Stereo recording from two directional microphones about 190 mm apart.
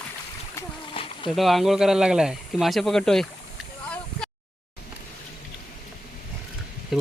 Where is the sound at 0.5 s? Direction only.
25° left (ahead or behind).